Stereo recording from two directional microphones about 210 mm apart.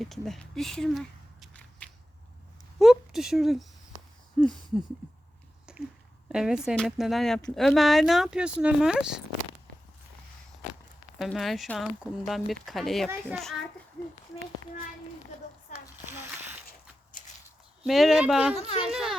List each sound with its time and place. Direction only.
0.0 s a sound: centre (ahead or behind)
2.7 s speech: centre (ahead or behind)
4.4 s a sound: centre (ahead or behind)
5.7 s a sound: 5° right (ahead or behind)
6.2 s speech: 5° right (ahead or behind)
11.2 s a child's voice: centre (ahead or behind)
14.6 s a child's voice: 40° right (ahead or behind)
16.0 s a sound: 10° right (ahead or behind)
17.1 s walk: 40° left (ahead or behind)
17.8 s speech: centre (ahead or behind)
18.5 s speech: 30° left (ahead or behind)
18.9 s speech: 5° right (ahead or behind)